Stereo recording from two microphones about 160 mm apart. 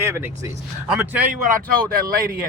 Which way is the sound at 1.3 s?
55° right (ahead or behind).